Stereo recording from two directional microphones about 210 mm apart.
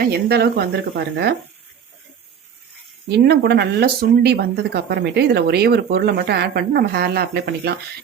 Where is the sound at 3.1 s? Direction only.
50° right (ahead or behind).